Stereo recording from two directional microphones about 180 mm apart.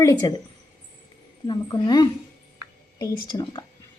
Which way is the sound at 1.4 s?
25° left (ahead or behind).